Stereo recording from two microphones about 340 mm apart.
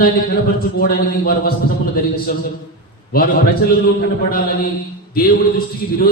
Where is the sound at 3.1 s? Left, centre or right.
Left.